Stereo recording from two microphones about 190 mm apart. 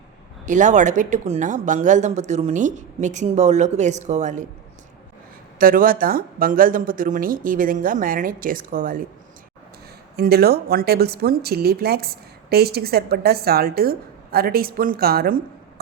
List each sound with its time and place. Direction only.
0.4 s speech: 40° right (ahead or behind)
5.5 s speech: 50° right (ahead or behind)
10.2 s speech: 55° right (ahead or behind)